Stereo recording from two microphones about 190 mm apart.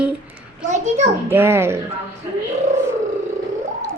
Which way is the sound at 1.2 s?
10° right (ahead or behind).